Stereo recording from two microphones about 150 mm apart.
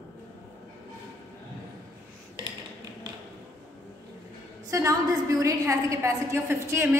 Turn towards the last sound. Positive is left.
turn(degrees=-20)  # may be behind; listen again after turning